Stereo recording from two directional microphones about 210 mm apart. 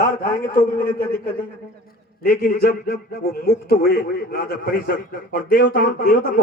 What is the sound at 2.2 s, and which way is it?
A man's voice, 40° left (ahead or behind).